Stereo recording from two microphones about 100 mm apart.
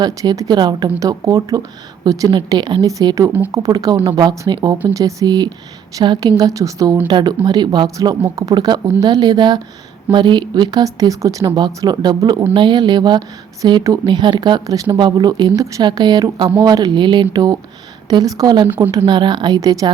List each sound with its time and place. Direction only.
0.0 s a woman's voice: 40° right (ahead or behind)
0.9 s a woman's voice: 35° right (ahead or behind)
2.3 s a woman's voice: 50° right (ahead or behind); by 7.0 s 35° right (ahead or behind)
7.1 s a woman's voice: 50° right (ahead or behind)
7.9 s a woman's voice: 35° right (ahead or behind)
11.4 s a woman's voice: 50° right (ahead or behind)
19.5 s a woman's voice: 35° right (ahead or behind)